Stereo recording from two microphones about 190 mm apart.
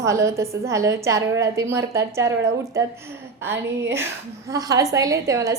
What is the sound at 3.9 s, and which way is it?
A woman's voice, 15° right (ahead or behind).